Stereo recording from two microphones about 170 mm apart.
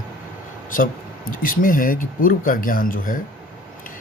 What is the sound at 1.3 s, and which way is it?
Speech, 55° left (ahead or behind).